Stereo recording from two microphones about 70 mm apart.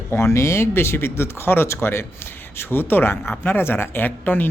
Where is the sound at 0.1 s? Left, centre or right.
Left.